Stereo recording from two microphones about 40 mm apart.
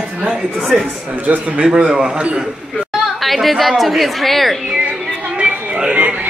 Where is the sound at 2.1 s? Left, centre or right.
Right.